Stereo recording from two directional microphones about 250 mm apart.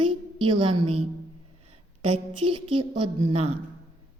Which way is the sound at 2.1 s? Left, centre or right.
Right.